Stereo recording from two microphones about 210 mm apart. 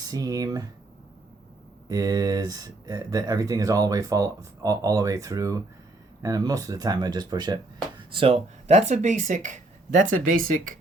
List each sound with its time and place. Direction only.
0.0 s speech: 15° right (ahead or behind)
1.9 s speech: 15° right (ahead or behind); by 10.8 s 40° right (ahead or behind)